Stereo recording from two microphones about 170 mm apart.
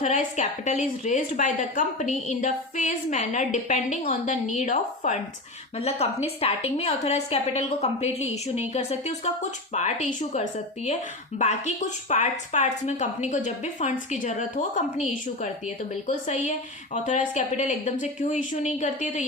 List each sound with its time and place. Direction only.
0.0 s a woman's voice: 45° left (ahead or behind)